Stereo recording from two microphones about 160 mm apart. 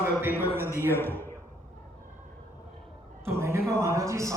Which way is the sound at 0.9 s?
15° left (ahead or behind).